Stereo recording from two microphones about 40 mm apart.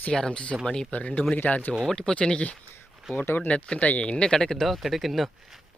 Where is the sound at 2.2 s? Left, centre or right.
Left.